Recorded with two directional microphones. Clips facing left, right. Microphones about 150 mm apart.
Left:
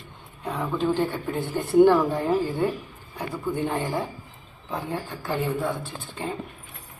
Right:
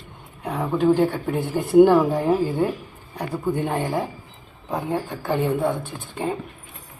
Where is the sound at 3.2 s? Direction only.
15° right (ahead or behind).